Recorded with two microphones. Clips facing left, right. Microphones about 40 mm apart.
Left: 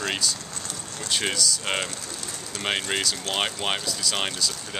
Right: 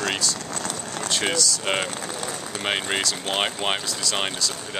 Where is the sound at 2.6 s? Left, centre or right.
Centre.